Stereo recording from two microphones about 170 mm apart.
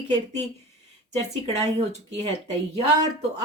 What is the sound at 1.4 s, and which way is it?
Speech, 40° right (ahead or behind).